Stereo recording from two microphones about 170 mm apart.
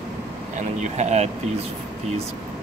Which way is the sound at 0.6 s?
40° right (ahead or behind).